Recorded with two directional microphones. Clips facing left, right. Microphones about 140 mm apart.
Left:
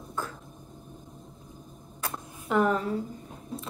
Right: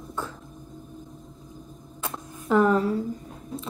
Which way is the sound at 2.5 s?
35° right (ahead or behind).